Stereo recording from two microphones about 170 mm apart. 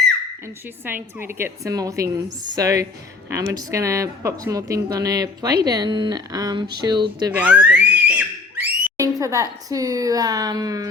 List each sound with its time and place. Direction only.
0.9 s speech: 10° right (ahead or behind)
7.3 s a sound: 10° right (ahead or behind)
9.0 s speech: 20° right (ahead or behind)